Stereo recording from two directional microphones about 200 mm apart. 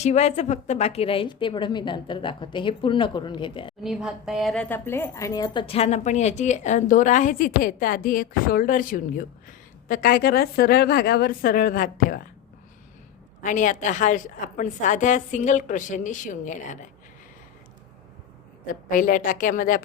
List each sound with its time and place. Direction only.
0.0 s a woman's voice: 35° left (ahead or behind)
3.8 s speech: centre (ahead or behind); by 12.2 s 40° left (ahead or behind)
13.4 s speech: 40° left (ahead or behind)
18.7 s speech: 40° left (ahead or behind)